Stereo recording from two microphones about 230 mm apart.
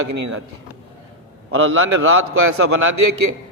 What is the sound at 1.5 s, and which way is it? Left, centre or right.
A man's voice, right.